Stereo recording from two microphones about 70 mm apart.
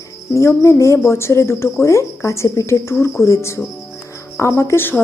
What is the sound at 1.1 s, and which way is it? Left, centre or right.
Speech, left.